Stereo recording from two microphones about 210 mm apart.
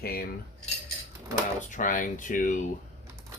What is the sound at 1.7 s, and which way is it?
Speech, 40° left (ahead or behind).